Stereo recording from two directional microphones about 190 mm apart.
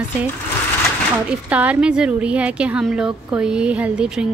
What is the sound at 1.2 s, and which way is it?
A woman's voice, 5° right (ahead or behind).